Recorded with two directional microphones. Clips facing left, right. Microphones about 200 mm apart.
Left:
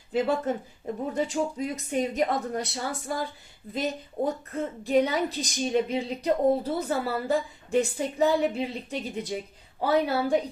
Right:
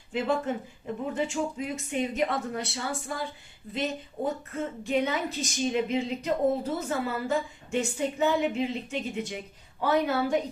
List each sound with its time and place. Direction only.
0.1 s a woman's voice: 35° left (ahead or behind)